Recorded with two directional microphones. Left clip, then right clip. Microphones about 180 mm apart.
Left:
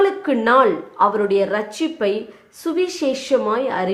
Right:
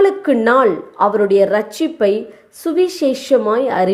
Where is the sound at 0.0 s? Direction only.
30° right (ahead or behind).